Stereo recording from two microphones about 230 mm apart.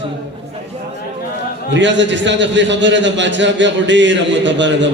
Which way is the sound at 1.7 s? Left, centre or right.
Right.